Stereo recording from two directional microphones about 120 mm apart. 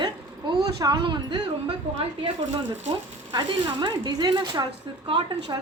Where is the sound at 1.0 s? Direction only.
40° right (ahead or behind).